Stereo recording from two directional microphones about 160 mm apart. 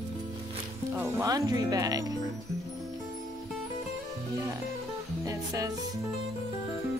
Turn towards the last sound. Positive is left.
turn(degrees=-20)  # may be behind; listen again after turning